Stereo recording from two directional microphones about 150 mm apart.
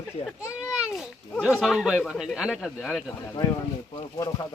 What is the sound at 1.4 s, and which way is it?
Speech, 5° left (ahead or behind).